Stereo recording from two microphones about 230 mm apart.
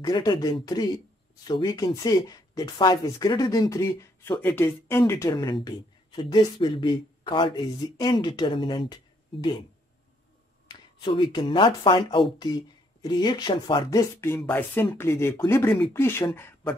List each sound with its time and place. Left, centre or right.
0.0 s speech: centre
11.0 s speech: centre